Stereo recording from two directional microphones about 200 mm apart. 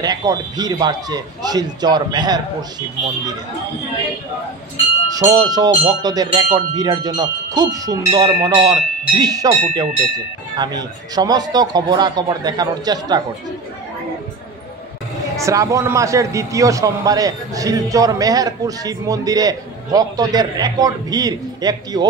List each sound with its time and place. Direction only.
0.0 s speech: 20° right (ahead or behind)
5.1 s speech: 20° right (ahead or behind)
15.3 s a man's voice: 15° right (ahead or behind)